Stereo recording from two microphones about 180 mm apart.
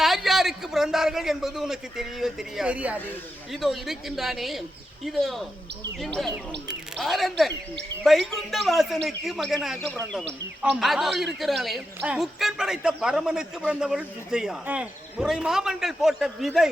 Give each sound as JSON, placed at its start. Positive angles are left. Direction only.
{"t": 0.0, "sound": "a man's voice", "side_deg": 0}
{"t": 6.7, "sound": "a man's voice", "side_deg": 0}